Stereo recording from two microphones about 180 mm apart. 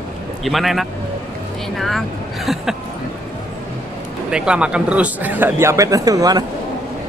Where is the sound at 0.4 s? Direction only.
Centre (ahead or behind).